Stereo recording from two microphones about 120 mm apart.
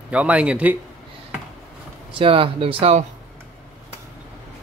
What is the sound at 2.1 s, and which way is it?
Speech, 45° right (ahead or behind).